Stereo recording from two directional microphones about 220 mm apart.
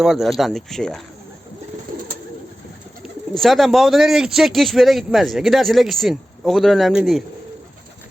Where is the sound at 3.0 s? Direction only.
Centre (ahead or behind).